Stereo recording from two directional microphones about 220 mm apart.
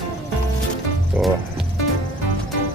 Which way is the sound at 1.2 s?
10° right (ahead or behind).